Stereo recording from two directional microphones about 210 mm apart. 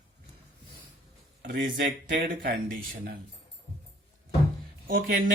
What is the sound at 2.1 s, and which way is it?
Speech, 45° right (ahead or behind).